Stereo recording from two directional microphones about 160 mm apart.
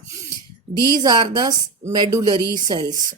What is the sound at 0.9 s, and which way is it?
Speech, 25° right (ahead or behind).